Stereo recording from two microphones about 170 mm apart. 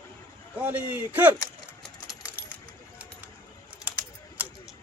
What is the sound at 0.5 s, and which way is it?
Speech, 10° right (ahead or behind).